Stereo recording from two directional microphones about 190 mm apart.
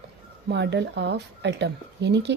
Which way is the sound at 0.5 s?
65° right (ahead or behind).